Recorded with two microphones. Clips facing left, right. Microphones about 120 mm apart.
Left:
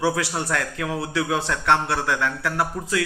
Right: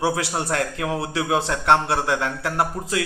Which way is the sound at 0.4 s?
25° right (ahead or behind).